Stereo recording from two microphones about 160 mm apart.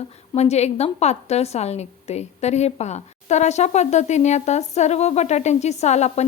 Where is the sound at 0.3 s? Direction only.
45° left (ahead or behind).